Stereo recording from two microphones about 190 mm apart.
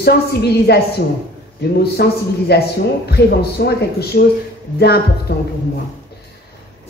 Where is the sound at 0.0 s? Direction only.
60° left (ahead or behind).